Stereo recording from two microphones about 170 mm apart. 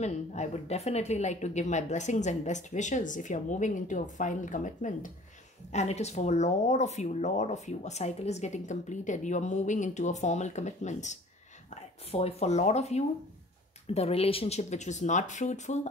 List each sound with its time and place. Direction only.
0.0 s speech: 45° left (ahead or behind)